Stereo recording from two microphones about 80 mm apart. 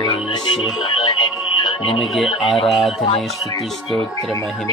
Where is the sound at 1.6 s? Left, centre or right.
Left.